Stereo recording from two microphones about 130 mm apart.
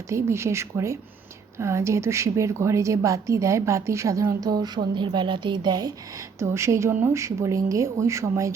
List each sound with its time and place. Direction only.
0.1 s a woman's voice: 20° right (ahead or behind)
6.4 s a woman's voice: 20° right (ahead or behind)